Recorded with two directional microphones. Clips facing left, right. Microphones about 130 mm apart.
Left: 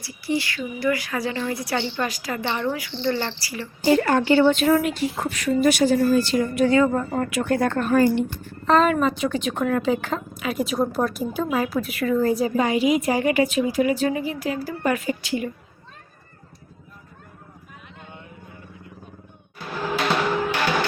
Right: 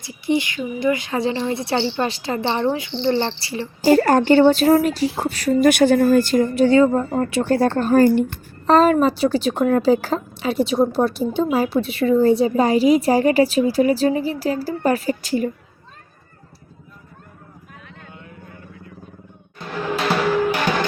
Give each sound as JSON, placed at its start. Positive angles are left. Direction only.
{"t": 0.0, "sound": "speech", "side_deg": -20}
{"t": 3.8, "sound": "a woman's voice", "side_deg": -40}
{"t": 5.6, "sound": "speech", "side_deg": -60}
{"t": 6.4, "sound": "a woman's voice", "side_deg": -30}
{"t": 8.0, "sound": "a woman's voice", "side_deg": -50}
{"t": 19.5, "sound": "music", "side_deg": 0}